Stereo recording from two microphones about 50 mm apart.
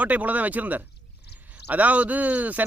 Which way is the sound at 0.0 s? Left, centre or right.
Right.